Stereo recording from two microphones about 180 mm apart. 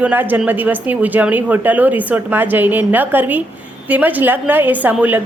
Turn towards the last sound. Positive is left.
turn(degrees=-10)  # may be behind; listen again after turning